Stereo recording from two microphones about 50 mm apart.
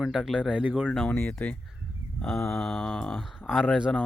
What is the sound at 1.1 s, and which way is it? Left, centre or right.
Speech, left.